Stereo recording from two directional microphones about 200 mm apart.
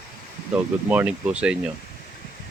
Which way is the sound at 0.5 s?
5° right (ahead or behind).